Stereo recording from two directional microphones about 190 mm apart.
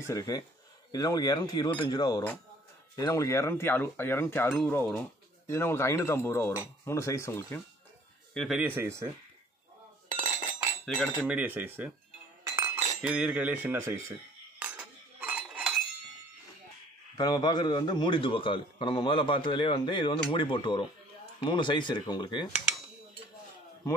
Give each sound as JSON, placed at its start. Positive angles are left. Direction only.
{"t": 0.0, "sound": "chink", "side_deg": 15}
{"t": 0.9, "sound": "a man's voice", "side_deg": 20}
{"t": 3.0, "sound": "chink", "side_deg": 15}
{"t": 8.4, "sound": "speech", "side_deg": -5}
{"t": 10.0, "sound": "cutlery", "side_deg": -40}
{"t": 11.1, "sound": "speech", "side_deg": -5}
{"t": 12.4, "sound": "cutlery", "side_deg": -15}
{"t": 13.0, "sound": "speech", "side_deg": -5}
{"t": 14.6, "sound": "cutlery", "side_deg": -5}
{"t": 17.2, "sound": "a man's voice", "side_deg": 20}